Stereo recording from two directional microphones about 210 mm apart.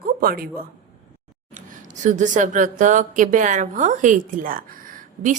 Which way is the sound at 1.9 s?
35° right (ahead or behind).